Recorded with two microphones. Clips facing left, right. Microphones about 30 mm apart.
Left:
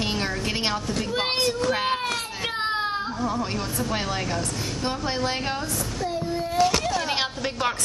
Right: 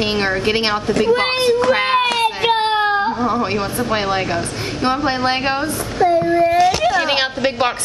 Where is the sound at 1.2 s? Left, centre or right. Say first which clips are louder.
Right 8 dB; right.